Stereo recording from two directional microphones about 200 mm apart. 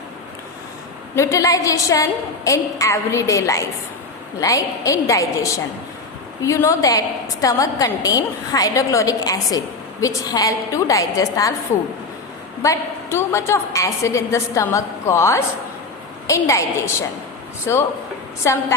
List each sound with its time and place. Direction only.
1.1 s a woman's voice: 15° left (ahead or behind)
12.6 s a woman's voice: 15° left (ahead or behind)